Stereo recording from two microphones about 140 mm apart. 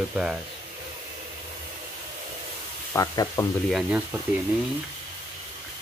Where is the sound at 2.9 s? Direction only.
25° left (ahead or behind).